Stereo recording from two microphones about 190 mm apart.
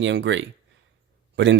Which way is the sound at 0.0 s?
70° right (ahead or behind).